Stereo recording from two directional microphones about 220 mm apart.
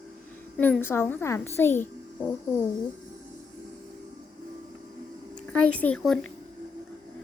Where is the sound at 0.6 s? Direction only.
10° left (ahead or behind).